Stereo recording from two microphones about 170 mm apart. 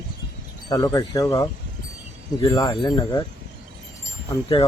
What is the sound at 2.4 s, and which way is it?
Speech, 20° left (ahead or behind).